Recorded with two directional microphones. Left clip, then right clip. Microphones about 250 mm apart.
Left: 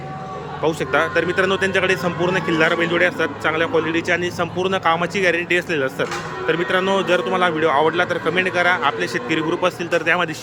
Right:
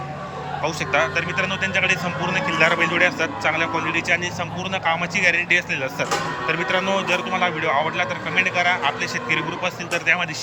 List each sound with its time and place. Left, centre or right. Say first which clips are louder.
0.6 s a man's voice: left 2 dB; centre